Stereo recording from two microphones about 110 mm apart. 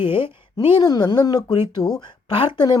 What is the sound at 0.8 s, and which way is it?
Speech, 35° left (ahead or behind).